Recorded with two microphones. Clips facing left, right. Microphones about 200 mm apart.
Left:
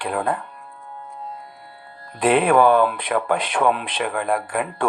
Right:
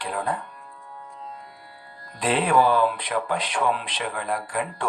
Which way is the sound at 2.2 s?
55° left (ahead or behind).